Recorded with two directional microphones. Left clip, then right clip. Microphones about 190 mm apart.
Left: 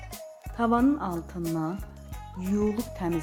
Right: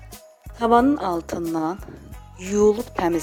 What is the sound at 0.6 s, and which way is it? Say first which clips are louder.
Speech: right 7 dB; 45° right (ahead or behind).